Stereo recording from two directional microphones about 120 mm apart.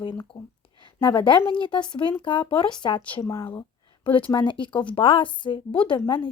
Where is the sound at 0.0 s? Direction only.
40° left (ahead or behind).